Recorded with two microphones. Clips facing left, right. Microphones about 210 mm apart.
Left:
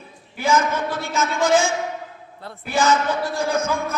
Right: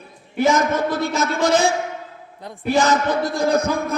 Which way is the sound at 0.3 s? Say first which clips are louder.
Right 3 dB; 40° right (ahead or behind).